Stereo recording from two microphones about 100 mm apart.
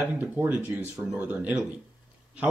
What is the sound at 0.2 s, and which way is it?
Speech, 15° right (ahead or behind).